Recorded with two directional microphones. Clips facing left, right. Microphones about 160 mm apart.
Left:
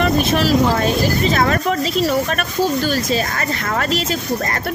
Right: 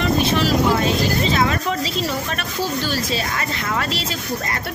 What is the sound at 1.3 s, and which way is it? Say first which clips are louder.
A woman's voice: left 3 dB; 50° left (ahead or behind).